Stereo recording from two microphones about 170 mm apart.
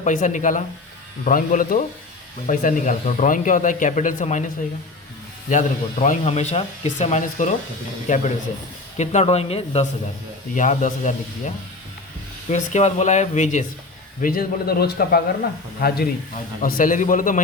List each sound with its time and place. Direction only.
0.0 s a man's voice: 50° left (ahead or behind)
5.5 s speech: 45° left (ahead or behind)
10.5 s speech: 45° left (ahead or behind)
14.2 s a man's voice: 60° left (ahead or behind)